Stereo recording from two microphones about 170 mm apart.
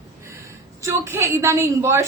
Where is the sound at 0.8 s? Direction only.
15° right (ahead or behind).